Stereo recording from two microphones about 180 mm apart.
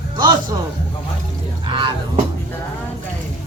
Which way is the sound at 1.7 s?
25° right (ahead or behind).